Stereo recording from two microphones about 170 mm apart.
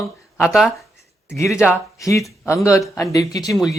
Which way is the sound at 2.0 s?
20° left (ahead or behind).